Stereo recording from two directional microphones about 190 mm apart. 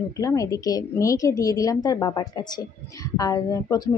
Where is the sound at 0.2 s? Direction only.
15° left (ahead or behind).